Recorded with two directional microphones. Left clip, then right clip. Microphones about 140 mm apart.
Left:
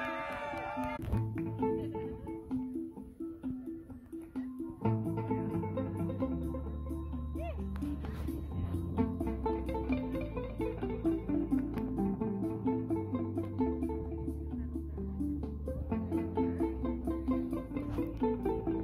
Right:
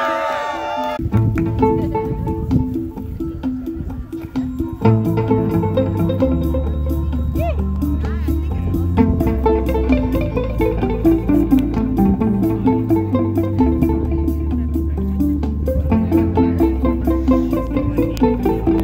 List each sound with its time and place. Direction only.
0.7 s music: 70° left (ahead or behind)
4.8 s music: 5° left (ahead or behind)
8.9 s music: 5° right (ahead or behind)
15.9 s music: 5° right (ahead or behind)